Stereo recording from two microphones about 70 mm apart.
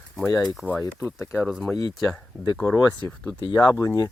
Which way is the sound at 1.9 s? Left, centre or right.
Centre.